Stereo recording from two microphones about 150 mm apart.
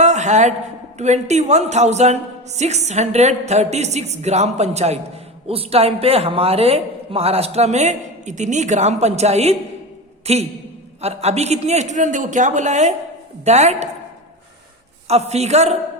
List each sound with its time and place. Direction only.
0.0 s a sound: 50° right (ahead or behind)
0.9 s a man's voice: 50° right (ahead or behind)
15.0 s a man's voice: 45° right (ahead or behind)